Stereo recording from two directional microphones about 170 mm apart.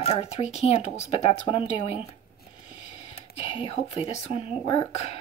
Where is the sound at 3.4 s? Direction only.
35° left (ahead or behind).